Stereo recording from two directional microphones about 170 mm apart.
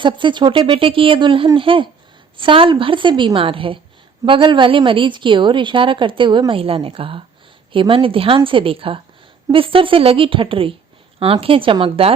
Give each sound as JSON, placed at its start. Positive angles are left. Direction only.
{"t": 0.0, "sound": "a woman's voice", "side_deg": -30}